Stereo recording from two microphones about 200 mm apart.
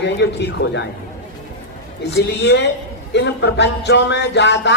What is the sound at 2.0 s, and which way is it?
Music, 60° left (ahead or behind).